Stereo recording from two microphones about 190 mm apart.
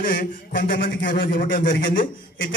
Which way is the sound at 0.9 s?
70° left (ahead or behind).